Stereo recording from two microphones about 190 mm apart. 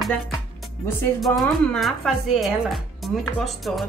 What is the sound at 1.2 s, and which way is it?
Speech, centre (ahead or behind).